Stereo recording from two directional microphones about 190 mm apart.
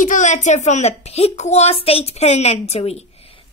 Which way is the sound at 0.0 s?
40° left (ahead or behind).